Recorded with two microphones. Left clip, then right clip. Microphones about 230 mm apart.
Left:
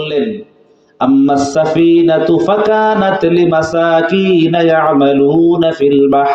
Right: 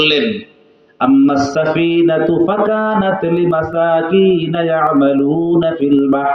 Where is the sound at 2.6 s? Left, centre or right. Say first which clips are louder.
Left 4 dB; left.